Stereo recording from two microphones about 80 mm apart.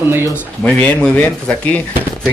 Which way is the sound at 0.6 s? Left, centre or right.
Centre.